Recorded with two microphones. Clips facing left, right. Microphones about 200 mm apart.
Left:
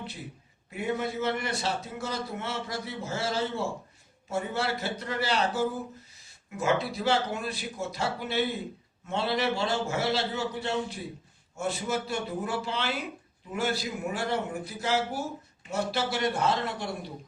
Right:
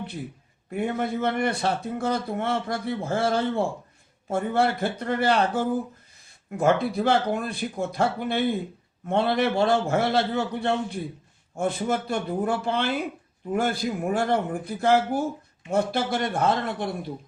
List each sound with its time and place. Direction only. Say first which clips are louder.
0.7 s a man's voice: right 4 dB; 55° right (ahead or behind)